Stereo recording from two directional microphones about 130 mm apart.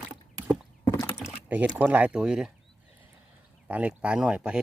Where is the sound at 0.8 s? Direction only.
20° left (ahead or behind).